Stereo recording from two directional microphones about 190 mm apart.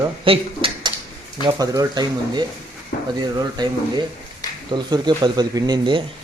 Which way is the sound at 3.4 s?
20° right (ahead or behind).